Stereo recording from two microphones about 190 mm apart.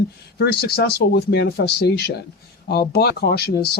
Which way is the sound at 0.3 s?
55° left (ahead or behind).